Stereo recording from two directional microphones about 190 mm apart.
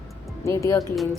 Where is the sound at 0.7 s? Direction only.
15° left (ahead or behind).